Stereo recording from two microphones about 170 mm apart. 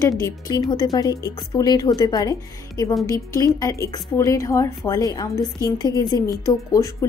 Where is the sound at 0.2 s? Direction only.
20° left (ahead or behind).